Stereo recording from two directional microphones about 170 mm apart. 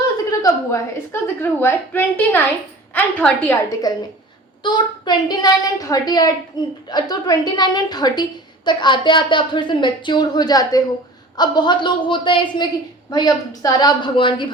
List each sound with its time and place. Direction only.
0.3 s a woman's voice: 20° left (ahead or behind)
3.9 s a woman's voice: 20° left (ahead or behind)